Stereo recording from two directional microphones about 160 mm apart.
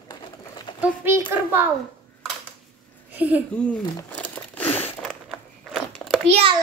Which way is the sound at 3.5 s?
5° left (ahead or behind).